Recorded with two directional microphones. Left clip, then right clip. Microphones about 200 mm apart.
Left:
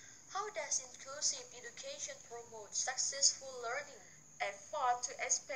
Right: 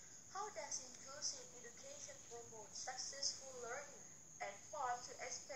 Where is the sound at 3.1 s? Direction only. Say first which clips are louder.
Left 11 dB; 35° left (ahead or behind).